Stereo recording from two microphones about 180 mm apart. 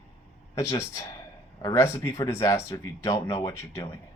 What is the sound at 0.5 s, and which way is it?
Speech, 15° left (ahead or behind).